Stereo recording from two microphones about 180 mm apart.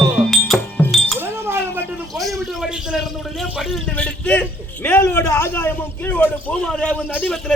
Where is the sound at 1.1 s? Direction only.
15° right (ahead or behind).